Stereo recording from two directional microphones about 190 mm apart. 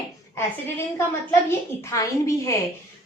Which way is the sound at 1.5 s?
15° left (ahead or behind).